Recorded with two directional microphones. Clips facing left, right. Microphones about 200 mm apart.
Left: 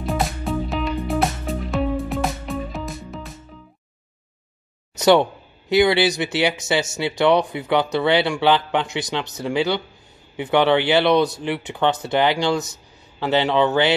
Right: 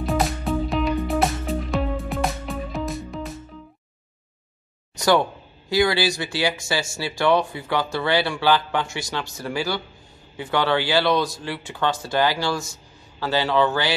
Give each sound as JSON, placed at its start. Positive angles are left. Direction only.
{"t": 0.0, "sound": "music", "side_deg": 0}
{"t": 4.9, "sound": "speech", "side_deg": 20}